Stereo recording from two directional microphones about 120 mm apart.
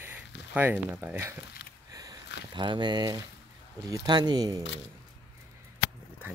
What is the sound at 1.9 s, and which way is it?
Sniff, 30° right (ahead or behind).